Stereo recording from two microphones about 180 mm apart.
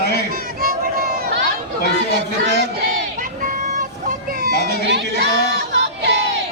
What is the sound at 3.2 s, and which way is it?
Vehicle, 45° right (ahead or behind).